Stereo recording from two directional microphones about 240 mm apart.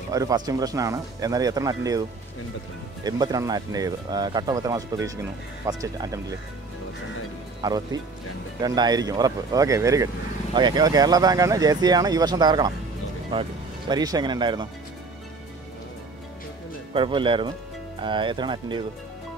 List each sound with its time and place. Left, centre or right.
0.1 s speech: centre
7.6 s speech: centre
16.9 s speech: right